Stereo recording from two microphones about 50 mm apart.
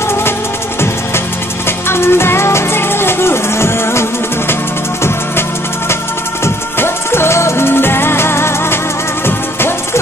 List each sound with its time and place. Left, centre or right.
1.9 s music: left
6.4 s music: left